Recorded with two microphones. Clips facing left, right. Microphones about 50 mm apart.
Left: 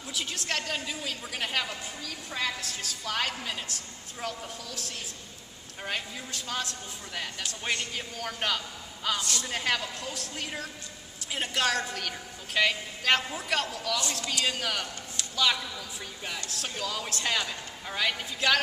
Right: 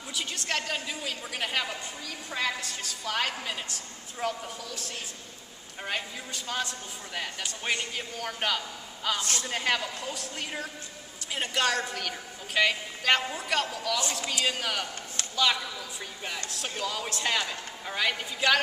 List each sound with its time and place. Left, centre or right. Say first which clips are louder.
0.1 s a woman's voice: right 1 dB; centre
9.2 s speech: right 1 dB; right
9.5 s a woman's voice: right 2 dB; centre